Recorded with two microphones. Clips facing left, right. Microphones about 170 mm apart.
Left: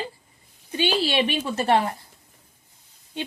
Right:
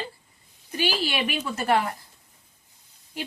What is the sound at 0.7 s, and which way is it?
A woman's voice, 25° left (ahead or behind).